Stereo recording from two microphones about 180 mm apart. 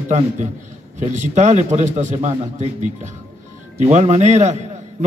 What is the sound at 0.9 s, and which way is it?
A man's voice, 40° right (ahead or behind).